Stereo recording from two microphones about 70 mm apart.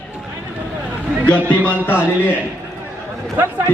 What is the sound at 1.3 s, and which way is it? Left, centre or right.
A man's voice, left.